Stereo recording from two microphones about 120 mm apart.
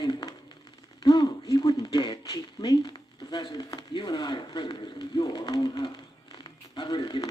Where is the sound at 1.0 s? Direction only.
35° left (ahead or behind).